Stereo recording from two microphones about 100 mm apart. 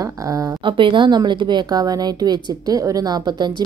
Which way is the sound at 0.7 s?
55° right (ahead or behind).